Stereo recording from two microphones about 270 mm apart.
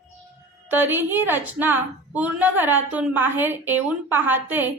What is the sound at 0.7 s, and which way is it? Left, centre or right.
A woman's voice, centre.